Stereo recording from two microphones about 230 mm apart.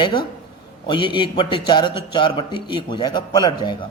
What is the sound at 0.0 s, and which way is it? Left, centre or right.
A man's voice, centre.